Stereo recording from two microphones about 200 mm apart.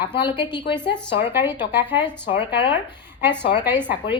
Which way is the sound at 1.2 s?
10° right (ahead or behind).